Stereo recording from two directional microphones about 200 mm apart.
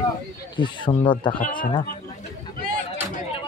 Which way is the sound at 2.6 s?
45° right (ahead or behind).